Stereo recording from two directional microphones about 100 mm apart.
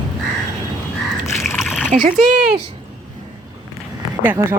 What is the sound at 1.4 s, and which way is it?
Splash, 5° right (ahead or behind).